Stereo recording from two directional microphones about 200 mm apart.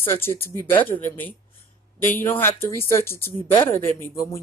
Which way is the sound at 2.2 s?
10° left (ahead or behind).